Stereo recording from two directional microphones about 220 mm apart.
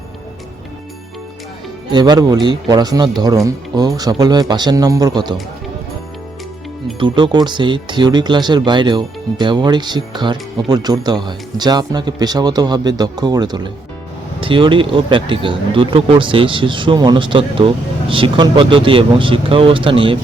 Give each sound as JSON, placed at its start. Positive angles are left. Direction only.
{"t": 1.9, "sound": "speech", "side_deg": -20}
{"t": 7.0, "sound": "speech", "side_deg": -20}